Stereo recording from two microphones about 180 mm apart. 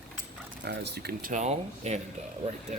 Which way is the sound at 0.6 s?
65° right (ahead or behind).